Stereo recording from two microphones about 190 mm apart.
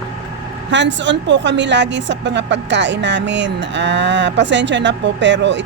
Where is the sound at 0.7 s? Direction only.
70° right (ahead or behind).